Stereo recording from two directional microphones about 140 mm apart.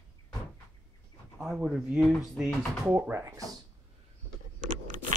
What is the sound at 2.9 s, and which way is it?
Speech, 10° right (ahead or behind).